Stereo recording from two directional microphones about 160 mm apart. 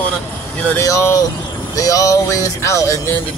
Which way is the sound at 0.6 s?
15° left (ahead or behind).